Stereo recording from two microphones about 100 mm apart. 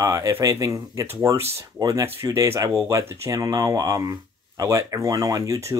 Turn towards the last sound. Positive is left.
turn(degrees=-30)  # may be behind; listen again after turning